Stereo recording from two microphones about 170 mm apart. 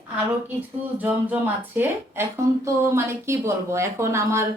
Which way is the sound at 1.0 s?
10° right (ahead or behind).